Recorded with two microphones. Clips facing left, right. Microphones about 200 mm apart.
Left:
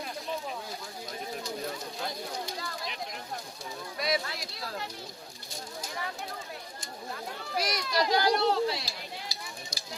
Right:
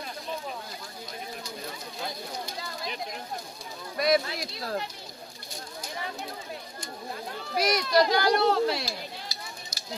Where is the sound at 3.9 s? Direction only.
50° right (ahead or behind).